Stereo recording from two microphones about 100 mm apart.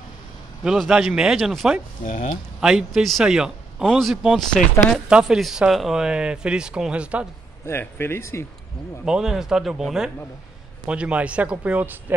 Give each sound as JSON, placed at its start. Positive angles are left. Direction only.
{"t": 0.7, "sound": "speech", "side_deg": -5}
{"t": 7.6, "sound": "speech", "side_deg": 20}
{"t": 9.0, "sound": "speech", "side_deg": -5}